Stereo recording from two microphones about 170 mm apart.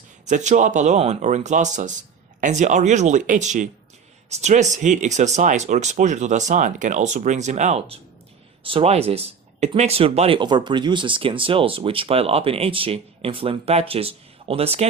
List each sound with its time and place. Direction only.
0.3 s speech: 45° right (ahead or behind)